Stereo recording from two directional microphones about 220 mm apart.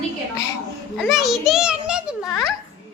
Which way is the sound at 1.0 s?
Centre (ahead or behind).